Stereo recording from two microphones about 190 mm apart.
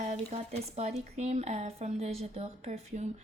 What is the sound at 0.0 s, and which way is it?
Speech, 35° right (ahead or behind).